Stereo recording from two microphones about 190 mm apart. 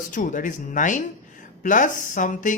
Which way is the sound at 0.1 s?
45° left (ahead or behind).